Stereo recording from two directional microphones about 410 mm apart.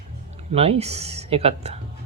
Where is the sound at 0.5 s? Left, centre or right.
Centre.